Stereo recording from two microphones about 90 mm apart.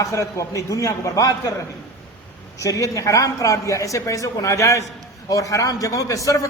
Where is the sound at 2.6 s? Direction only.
35° left (ahead or behind).